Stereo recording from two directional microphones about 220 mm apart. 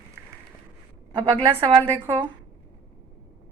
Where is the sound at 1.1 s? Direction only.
25° right (ahead or behind).